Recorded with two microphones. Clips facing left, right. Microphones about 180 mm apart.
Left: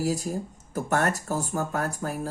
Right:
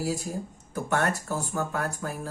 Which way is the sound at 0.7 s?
40° left (ahead or behind).